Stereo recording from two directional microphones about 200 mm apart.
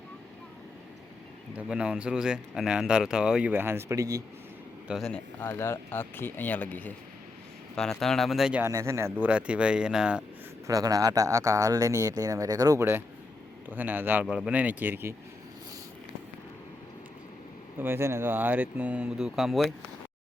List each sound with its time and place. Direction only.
1.5 s speech: 5° right (ahead or behind)
4.9 s speech: centre (ahead or behind)
10.7 s speech: 15° right (ahead or behind)
17.7 s speech: 10° right (ahead or behind)